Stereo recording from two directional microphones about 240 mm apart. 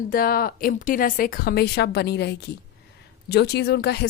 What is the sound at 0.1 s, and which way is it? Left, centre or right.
Speech, left.